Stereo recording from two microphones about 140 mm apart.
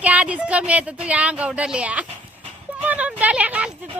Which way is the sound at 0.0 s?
10° right (ahead or behind).